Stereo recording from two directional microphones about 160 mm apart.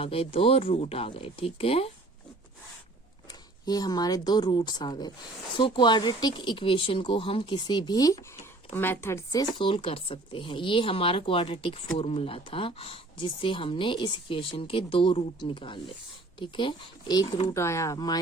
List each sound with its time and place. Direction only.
0.0 s speech: 35° left (ahead or behind)
3.7 s speech: 25° left (ahead or behind)
9.6 s speech: 35° left (ahead or behind)
17.5 s speech: 20° left (ahead or behind)